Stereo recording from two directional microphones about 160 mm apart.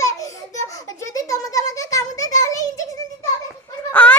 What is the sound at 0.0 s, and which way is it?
Giggle, 20° left (ahead or behind).